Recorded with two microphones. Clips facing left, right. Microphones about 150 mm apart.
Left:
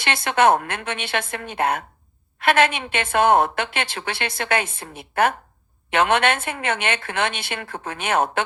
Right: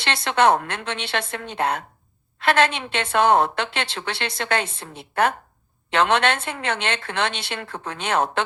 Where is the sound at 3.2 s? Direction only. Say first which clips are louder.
Left 1 dB; 55° left (ahead or behind).